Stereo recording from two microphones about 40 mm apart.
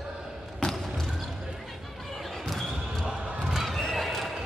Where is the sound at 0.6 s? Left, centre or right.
Left.